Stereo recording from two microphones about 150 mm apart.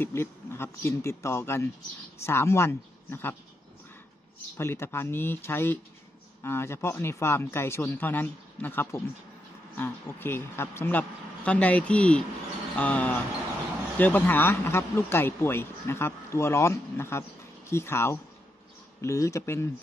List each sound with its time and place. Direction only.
0.0 s speech: 15° left (ahead or behind)
4.6 s speech: 15° left (ahead or behind)